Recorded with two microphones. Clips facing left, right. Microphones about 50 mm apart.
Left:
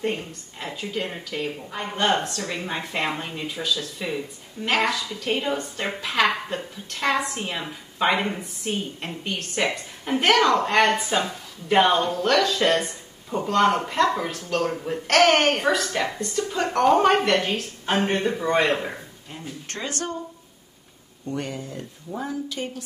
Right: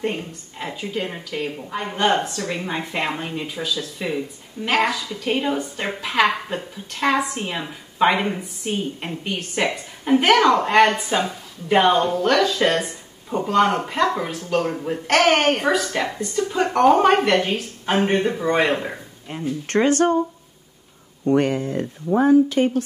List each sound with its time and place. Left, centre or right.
0.0 s a woman's voice: centre
19.2 s speech: right
21.3 s speech: right